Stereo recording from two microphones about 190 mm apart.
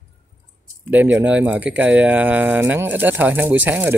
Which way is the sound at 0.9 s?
10° right (ahead or behind).